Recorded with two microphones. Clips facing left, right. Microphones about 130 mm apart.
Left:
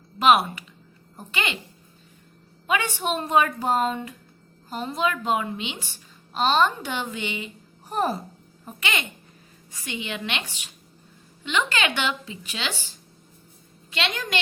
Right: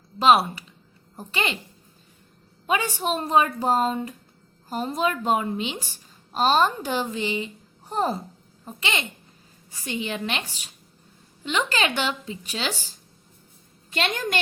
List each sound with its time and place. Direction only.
0.2 s a woman's voice: 30° right (ahead or behind)
2.6 s a woman's voice: 35° right (ahead or behind)